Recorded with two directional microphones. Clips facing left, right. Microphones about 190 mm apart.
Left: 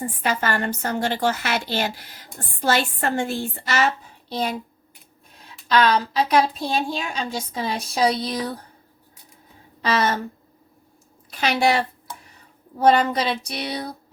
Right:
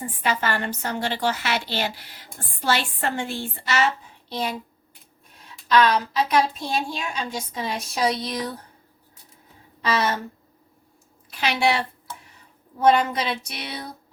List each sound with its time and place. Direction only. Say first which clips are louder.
0.2 s a woman's voice: left 1 dB; 45° left (ahead or behind)
11.3 s a woman's voice: left 2 dB; 40° left (ahead or behind)
12.8 s a woman's voice: left 1 dB; 35° left (ahead or behind)